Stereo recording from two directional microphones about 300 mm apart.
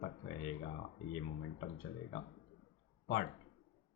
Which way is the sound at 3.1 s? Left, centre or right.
Left.